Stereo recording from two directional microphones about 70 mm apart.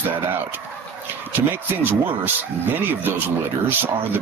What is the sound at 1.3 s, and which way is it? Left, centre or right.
Speech, right.